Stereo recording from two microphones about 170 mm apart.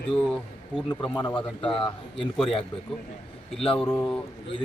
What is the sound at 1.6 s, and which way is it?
Speech, 5° left (ahead or behind).